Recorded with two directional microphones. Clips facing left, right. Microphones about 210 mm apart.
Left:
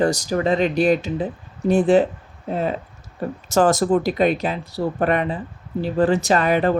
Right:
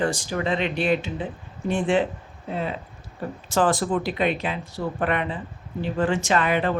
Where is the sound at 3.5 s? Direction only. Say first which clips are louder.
Left 5 dB; 45° left (ahead or behind).